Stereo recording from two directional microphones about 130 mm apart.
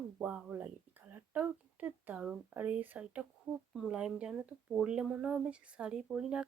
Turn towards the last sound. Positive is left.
turn(degrees=-5)  # may be behind; listen again after turning